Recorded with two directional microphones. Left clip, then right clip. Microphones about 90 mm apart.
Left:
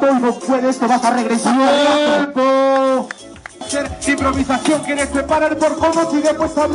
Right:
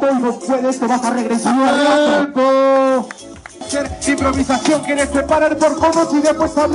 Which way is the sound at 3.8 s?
10° right (ahead or behind).